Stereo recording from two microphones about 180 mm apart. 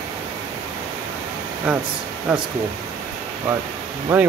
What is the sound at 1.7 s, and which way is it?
Speech, 5° right (ahead or behind).